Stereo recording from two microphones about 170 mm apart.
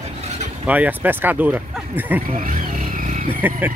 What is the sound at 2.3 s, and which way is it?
Vehicle, 50° right (ahead or behind).